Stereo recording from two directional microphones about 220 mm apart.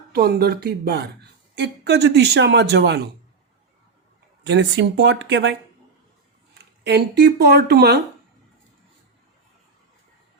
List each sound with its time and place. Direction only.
0.1 s speech: 45° right (ahead or behind)
4.4 s speech: 55° right (ahead or behind)